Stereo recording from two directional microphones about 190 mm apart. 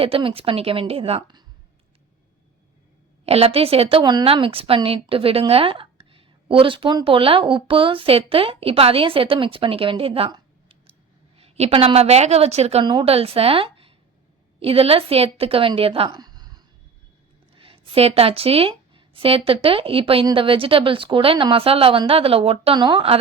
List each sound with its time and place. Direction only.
0.0 s a woman's voice: 30° right (ahead or behind)
3.2 s a woman's voice: 30° right (ahead or behind)